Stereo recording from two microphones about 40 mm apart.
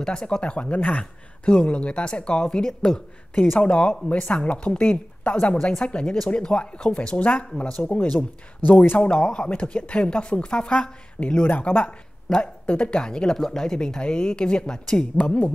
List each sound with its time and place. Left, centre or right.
0.4 s speech: left
7.9 s speech: left
9.1 s speech: left
11.4 s speech: left
11.8 s speech: left
12.9 s speech: left
15.1 s speech: left